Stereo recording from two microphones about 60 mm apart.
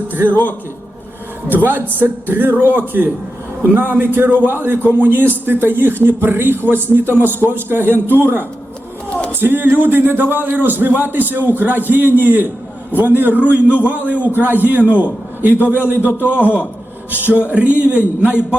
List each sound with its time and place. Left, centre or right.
1.5 s a man's voice: right
16.1 s a man's voice: left
17.1 s a man's voice: right